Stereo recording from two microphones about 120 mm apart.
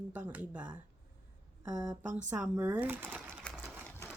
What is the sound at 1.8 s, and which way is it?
Speech, 10° right (ahead or behind).